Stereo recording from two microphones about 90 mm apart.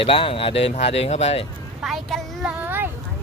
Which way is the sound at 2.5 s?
20° right (ahead or behind).